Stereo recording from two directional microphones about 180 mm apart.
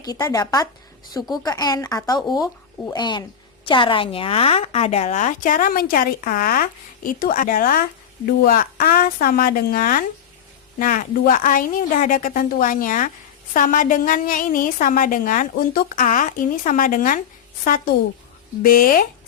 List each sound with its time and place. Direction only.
0.0 s a woman's voice: 20° left (ahead or behind); by 19.0 s 50° left (ahead or behind)